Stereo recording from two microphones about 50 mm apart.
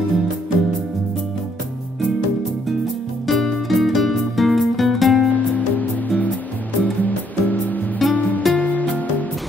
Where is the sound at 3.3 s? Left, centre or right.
Centre.